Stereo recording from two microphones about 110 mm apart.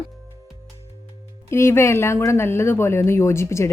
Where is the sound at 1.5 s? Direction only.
25° left (ahead or behind).